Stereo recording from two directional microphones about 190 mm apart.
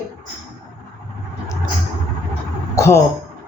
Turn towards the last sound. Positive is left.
turn(degrees=15)  # may be behind; listen again after turning